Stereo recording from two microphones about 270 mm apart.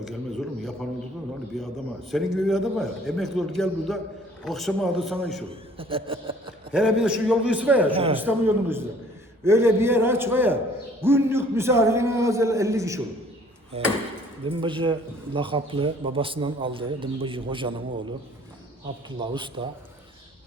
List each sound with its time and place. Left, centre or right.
0.0 s a sound: centre
1.5 s a man's voice: centre
5.5 s speech: centre
6.7 s a man's voice: centre
7.9 s a man's voice: right
8.2 s a man's voice: centre
13.7 s a man's voice: right
19.2 s a man's voice: centre